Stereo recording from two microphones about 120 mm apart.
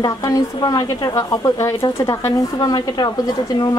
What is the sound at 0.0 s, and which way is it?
A woman's voice, 35° left (ahead or behind).